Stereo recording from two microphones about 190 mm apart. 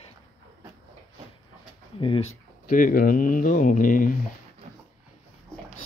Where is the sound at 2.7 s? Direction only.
45° left (ahead or behind).